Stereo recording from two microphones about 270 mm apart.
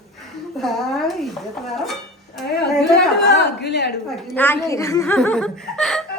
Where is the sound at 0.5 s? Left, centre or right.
Centre.